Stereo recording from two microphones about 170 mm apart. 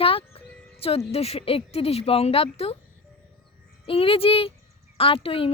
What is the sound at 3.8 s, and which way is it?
Speech, 35° left (ahead or behind).